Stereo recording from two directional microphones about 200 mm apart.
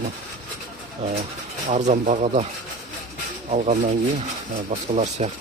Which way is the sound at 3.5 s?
35° right (ahead or behind).